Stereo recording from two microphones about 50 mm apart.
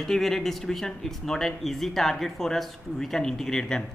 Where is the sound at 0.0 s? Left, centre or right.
Centre.